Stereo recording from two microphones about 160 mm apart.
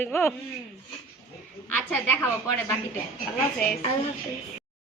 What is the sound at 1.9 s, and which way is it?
Speech, 15° left (ahead or behind).